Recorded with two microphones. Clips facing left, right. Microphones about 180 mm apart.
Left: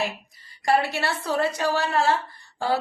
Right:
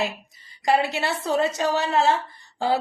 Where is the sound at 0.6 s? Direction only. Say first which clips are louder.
Right 1 dB; 20° right (ahead or behind).